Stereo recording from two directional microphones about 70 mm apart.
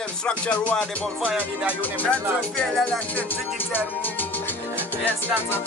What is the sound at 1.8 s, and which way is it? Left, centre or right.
Music, left.